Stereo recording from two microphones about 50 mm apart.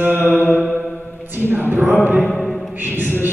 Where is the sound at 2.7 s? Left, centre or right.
Right.